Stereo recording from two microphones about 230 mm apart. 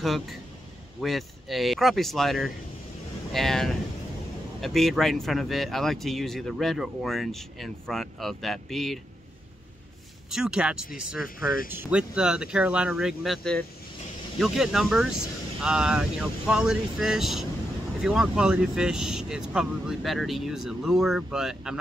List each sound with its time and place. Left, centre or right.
0.0 s speech: centre
10.3 s speech: centre
11.2 s speech: left
11.7 s speech: centre